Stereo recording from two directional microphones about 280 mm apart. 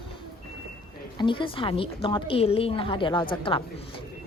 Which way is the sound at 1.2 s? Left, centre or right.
Centre.